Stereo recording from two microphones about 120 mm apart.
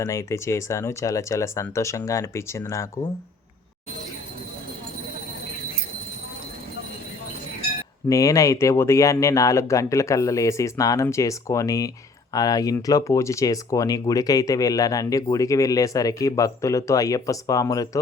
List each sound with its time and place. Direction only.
0.0 s speech: 25° left (ahead or behind)
8.1 s speech: 25° left (ahead or behind)